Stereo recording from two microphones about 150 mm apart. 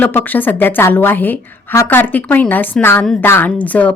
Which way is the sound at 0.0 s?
10° left (ahead or behind).